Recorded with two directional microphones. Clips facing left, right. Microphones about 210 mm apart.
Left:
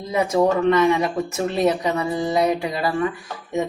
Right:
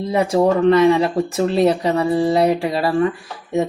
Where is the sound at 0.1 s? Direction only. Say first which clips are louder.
Right 2 dB; 30° right (ahead or behind).